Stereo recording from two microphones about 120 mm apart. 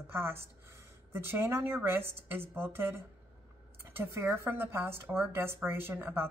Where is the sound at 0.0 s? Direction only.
20° right (ahead or behind).